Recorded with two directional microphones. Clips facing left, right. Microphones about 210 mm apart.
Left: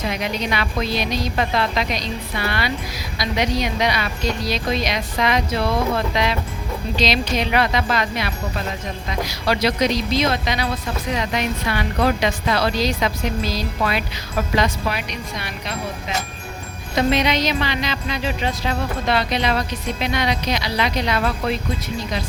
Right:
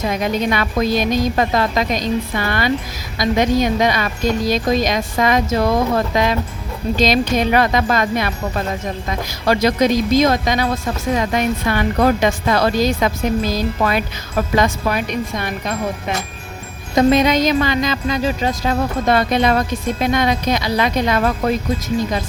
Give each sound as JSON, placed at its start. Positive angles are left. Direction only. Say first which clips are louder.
{"t": 0.1, "sound": "speech", "louder": "right 5 dB", "side_deg": -45}